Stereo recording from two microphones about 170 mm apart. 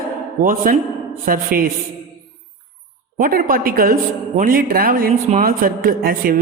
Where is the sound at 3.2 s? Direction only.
55° right (ahead or behind).